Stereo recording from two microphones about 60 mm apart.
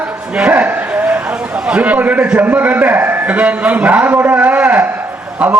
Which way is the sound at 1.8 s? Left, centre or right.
Right.